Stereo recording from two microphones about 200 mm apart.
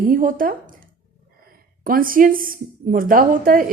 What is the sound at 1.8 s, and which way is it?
A woman's voice, 45° right (ahead or behind).